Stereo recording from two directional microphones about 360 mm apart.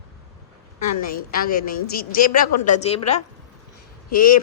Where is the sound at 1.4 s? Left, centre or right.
Left.